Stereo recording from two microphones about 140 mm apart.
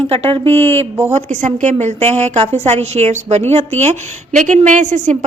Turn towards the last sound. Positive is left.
turn(degrees=-60)  # may be behind; listen again after turning